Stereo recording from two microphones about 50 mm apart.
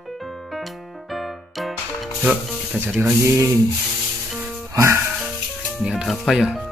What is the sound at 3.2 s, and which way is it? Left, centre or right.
Sanding, right.